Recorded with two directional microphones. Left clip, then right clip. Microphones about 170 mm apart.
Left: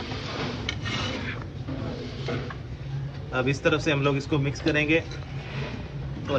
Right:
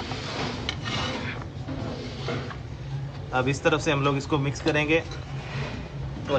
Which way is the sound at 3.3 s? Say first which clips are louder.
Right 1 dB; 20° right (ahead or behind).